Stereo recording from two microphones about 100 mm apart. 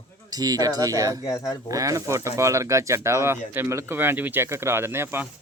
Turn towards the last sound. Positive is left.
turn(degrees=-25)  # may be behind; listen again after turning